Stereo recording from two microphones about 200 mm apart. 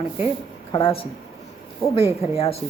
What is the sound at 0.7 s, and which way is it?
Speech, 25° left (ahead or behind).